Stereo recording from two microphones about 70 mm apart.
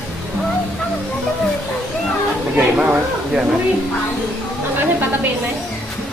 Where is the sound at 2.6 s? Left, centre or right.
Centre.